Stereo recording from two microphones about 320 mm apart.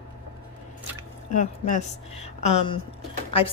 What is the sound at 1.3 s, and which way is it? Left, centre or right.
A woman's voice, left.